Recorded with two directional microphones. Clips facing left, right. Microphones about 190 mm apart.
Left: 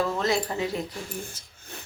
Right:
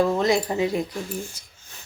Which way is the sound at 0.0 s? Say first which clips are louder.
Right 5 dB; 15° right (ahead or behind).